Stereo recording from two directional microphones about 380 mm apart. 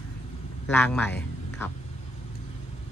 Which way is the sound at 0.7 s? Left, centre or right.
Centre.